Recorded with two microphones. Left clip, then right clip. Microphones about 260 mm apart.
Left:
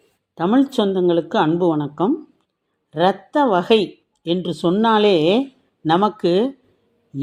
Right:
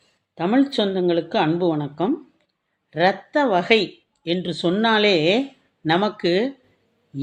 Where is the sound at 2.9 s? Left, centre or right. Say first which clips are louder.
Left 1 dB; centre.